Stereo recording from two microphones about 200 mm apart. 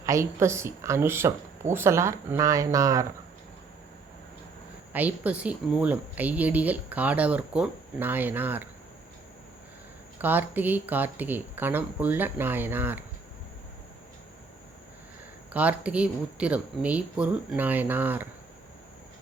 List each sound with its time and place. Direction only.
0.0 s speech: 15° right (ahead or behind)
4.9 s speech: 10° right (ahead or behind)
10.2 s speech: 10° right (ahead or behind)
15.5 s speech: 5° right (ahead or behind)